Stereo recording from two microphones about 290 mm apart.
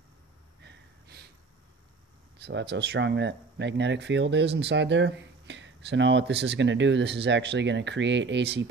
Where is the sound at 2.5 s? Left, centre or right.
Right.